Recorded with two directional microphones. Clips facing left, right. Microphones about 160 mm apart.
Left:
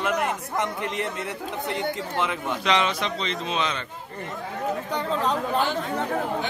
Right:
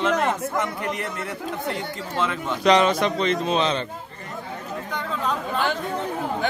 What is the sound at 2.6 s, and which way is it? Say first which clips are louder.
Speech: right 7 dB; 40° right (ahead or behind).